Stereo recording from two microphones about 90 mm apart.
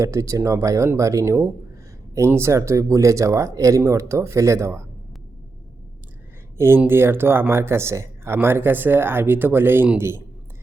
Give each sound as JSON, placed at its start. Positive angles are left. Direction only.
{"t": 0.0, "sound": "speech", "side_deg": -35}
{"t": 6.6, "sound": "speech", "side_deg": -25}